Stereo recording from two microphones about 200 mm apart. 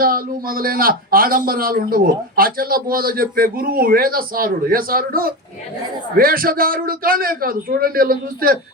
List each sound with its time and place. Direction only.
0.0 s a man's voice: 45° right (ahead or behind)